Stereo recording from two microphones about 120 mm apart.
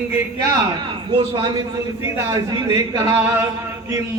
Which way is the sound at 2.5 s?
30° right (ahead or behind).